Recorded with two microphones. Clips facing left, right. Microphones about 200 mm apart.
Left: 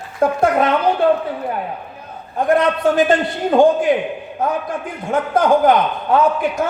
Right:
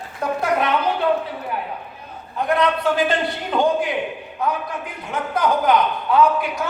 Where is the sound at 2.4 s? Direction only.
45° left (ahead or behind).